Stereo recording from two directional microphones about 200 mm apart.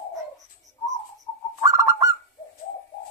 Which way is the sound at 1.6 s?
15° right (ahead or behind).